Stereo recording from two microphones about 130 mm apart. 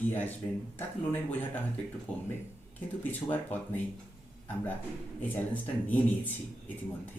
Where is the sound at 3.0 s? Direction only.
15° left (ahead or behind).